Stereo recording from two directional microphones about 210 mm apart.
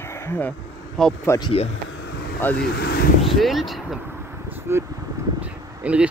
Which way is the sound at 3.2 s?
Centre (ahead or behind).